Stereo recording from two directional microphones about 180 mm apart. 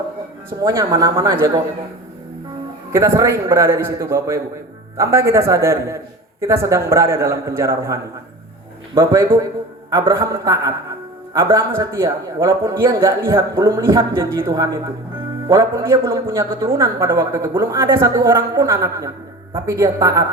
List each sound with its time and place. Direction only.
0.6 s a woman's voice: 15° right (ahead or behind)
2.9 s a woman's voice: 15° right (ahead or behind)
9.0 s a woman's voice: 15° right (ahead or behind)